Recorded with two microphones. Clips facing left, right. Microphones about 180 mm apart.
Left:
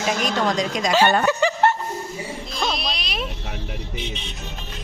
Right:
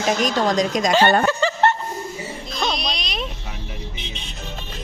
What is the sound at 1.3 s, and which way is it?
Chuckle, 15° left (ahead or behind).